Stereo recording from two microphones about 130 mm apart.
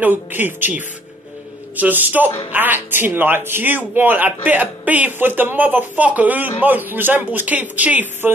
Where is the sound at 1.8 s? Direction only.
15° right (ahead or behind).